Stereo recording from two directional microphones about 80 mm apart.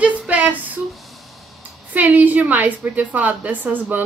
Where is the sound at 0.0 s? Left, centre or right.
Centre.